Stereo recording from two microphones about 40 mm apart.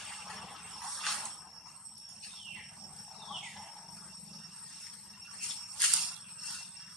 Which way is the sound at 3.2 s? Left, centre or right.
Centre.